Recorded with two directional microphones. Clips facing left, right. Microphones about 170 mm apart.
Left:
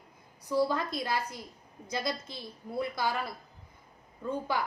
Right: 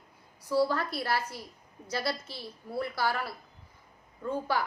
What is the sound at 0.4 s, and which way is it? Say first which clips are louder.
A woman's voice: right 1 dB; 15° left (ahead or behind).